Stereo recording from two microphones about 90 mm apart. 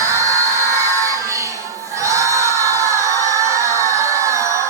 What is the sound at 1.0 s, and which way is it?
Crowd, 35° right (ahead or behind).